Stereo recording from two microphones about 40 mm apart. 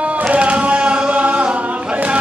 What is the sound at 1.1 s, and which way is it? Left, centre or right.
Music, right.